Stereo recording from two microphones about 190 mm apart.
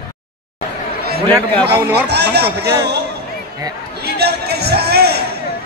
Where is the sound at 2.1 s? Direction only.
60° right (ahead or behind).